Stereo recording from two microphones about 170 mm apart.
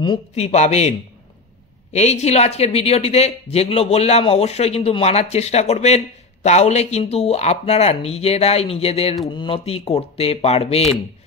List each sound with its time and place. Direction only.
0.4 s speech: 40° left (ahead or behind)